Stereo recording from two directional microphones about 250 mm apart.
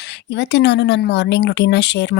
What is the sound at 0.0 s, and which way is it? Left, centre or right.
Speech, left.